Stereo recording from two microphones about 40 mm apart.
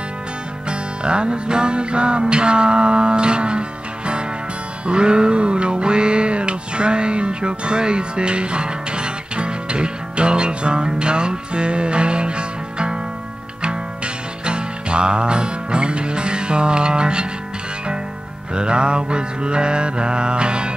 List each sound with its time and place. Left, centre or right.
0.7 s music: right
18.5 s music: right